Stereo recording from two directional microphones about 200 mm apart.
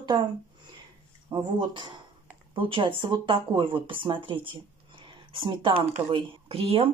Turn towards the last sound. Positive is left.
turn(degrees=-30)  # may be behind; listen again after turning